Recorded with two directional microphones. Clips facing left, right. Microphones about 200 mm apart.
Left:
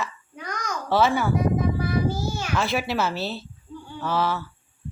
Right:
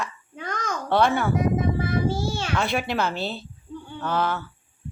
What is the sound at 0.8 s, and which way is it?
Speech, 5° left (ahead or behind).